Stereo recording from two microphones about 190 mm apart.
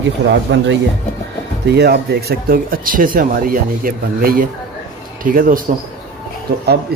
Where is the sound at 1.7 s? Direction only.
60° right (ahead or behind).